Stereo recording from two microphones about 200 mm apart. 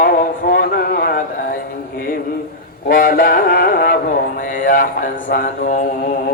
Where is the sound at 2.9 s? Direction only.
40° left (ahead or behind).